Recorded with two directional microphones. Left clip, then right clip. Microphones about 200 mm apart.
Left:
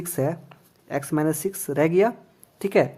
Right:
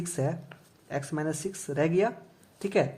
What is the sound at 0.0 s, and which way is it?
A woman's voice, 35° left (ahead or behind).